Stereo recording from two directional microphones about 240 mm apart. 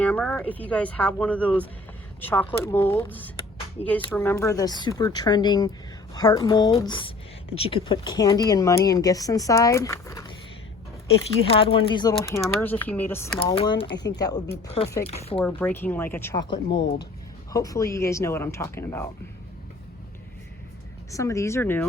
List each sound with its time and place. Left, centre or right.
0.0 s speech: centre
11.4 s speech: left
12.5 s speech: centre
13.4 s speech: left
15.4 s speech: centre
21.1 s speech: centre